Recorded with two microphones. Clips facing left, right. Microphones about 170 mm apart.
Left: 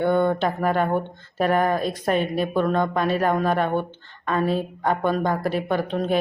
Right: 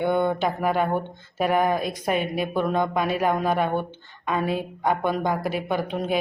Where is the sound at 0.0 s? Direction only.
15° right (ahead or behind).